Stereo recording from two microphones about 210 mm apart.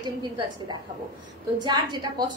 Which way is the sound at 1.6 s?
20° right (ahead or behind).